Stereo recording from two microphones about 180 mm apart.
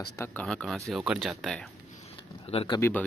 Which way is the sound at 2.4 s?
30° left (ahead or behind).